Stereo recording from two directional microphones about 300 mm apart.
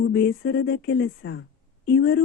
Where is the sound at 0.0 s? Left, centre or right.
Left.